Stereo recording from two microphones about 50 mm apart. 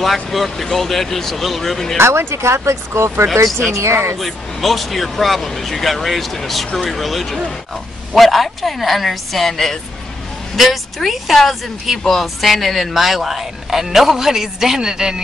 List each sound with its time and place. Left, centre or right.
0.0 s speech: centre
2.0 s speech: right
4.2 s speech: centre